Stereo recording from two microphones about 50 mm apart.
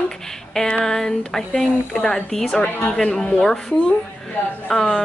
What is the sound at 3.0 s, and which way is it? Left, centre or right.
Speech, centre.